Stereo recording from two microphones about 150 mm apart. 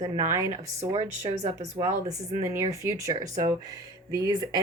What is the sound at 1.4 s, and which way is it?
Speech, 50° right (ahead or behind).